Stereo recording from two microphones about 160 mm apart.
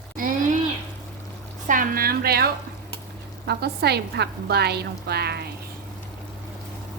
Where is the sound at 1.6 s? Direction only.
55° right (ahead or behind); by 2.5 s 70° right (ahead or behind).